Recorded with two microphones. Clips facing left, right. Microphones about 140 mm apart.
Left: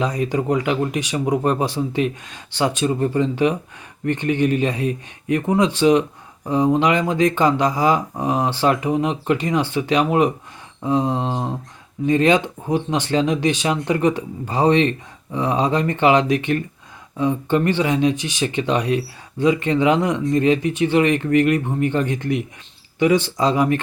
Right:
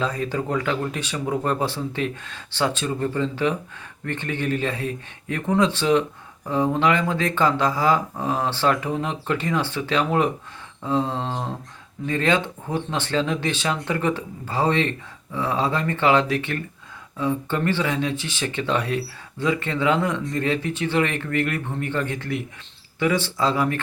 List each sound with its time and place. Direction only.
0.0 s speech: 15° left (ahead or behind)